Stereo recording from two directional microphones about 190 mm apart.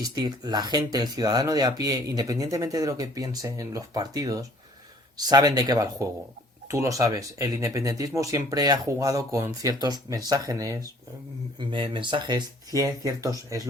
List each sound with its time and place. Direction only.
0.0 s speech: 20° right (ahead or behind)